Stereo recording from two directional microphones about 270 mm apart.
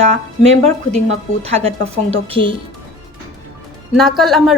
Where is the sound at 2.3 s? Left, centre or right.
Centre.